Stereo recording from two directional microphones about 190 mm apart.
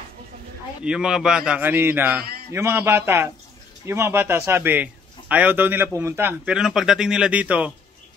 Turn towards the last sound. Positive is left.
turn(degrees=-5)  # may be behind; listen again after turning